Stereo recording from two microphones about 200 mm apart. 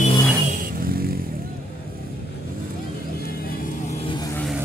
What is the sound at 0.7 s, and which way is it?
Vehicle, 45° right (ahead or behind).